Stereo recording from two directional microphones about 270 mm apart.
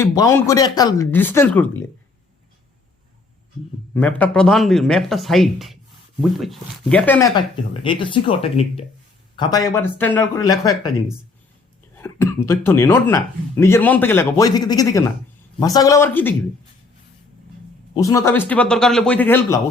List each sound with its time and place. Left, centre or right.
0.0 s speech: centre
3.9 s speech: centre
11.9 s speech: centre
17.9 s speech: centre